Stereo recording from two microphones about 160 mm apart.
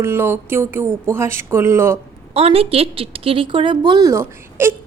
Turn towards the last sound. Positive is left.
turn(degrees=-15)  # may be behind; listen again after turning